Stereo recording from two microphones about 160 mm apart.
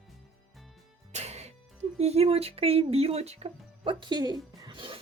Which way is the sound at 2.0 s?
40° right (ahead or behind).